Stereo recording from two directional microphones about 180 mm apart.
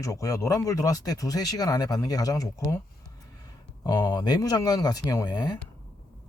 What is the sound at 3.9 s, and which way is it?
Speech, 15° left (ahead or behind).